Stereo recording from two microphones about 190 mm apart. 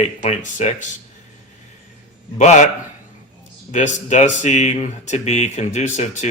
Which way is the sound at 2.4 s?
35° left (ahead or behind).